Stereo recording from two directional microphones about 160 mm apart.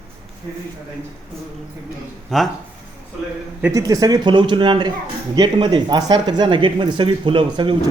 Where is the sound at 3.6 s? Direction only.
20° right (ahead or behind).